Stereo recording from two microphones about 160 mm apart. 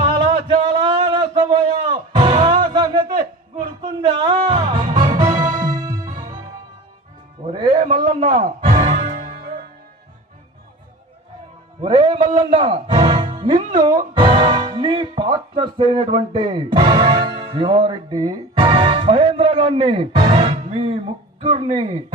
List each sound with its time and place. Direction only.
0.0 s a sound: 30° right (ahead or behind)
1.3 s music: 35° right (ahead or behind)
4.1 s speech: 30° right (ahead or behind)
4.9 s music: 25° right (ahead or behind)
8.1 s music: 35° right (ahead or behind); by 9.6 s 60° right (ahead or behind)
11.8 s a man's voice: 30° right (ahead or behind)
13.0 s music: 30° right (ahead or behind)
13.7 s a man's voice: 30° right (ahead or behind)